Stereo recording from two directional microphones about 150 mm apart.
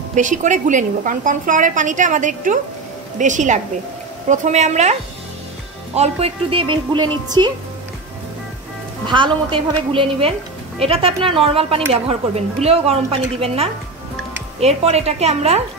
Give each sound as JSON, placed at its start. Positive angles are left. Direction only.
{"t": 0.1, "sound": "a woman's voice", "side_deg": -55}
{"t": 5.9, "sound": "a woman's voice", "side_deg": -45}
{"t": 9.0, "sound": "a woman's voice", "side_deg": -35}